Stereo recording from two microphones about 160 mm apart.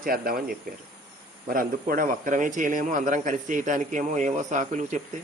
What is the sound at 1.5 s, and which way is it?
A man's voice, 60° right (ahead or behind).